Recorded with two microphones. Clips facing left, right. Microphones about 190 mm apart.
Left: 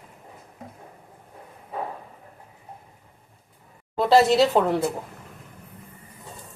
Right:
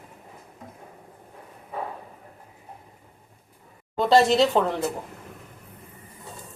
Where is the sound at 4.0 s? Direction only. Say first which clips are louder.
Left 1 dB; 5° left (ahead or behind).